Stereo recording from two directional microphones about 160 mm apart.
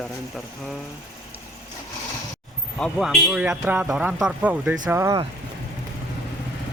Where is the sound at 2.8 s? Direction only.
5° left (ahead or behind); by 5.2 s 15° right (ahead or behind).